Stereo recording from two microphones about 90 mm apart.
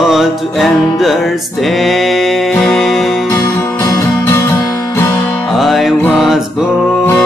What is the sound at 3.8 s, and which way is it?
Music, 30° left (ahead or behind).